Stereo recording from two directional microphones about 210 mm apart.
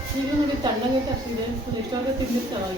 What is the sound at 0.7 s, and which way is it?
Speech, 20° right (ahead or behind).